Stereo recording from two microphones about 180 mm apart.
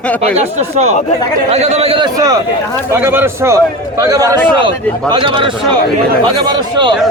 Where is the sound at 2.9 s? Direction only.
10° right (ahead or behind).